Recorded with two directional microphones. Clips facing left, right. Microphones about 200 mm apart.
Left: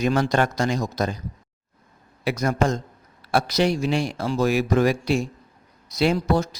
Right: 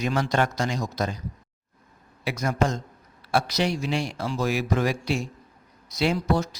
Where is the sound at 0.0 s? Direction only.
50° left (ahead or behind).